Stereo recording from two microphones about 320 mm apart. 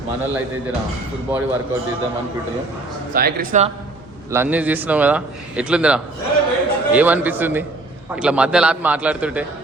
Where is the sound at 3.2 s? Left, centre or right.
Right.